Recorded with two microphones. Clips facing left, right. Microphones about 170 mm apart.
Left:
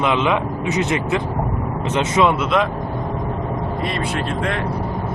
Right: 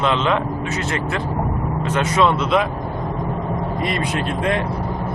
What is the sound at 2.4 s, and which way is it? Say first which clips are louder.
Speech: even; centre (ahead or behind).